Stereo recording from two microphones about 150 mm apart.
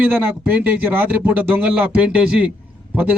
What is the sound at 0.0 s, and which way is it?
A man's voice, 10° right (ahead or behind).